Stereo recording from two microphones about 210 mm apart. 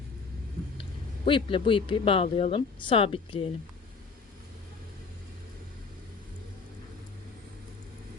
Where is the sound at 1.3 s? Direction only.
25° left (ahead or behind).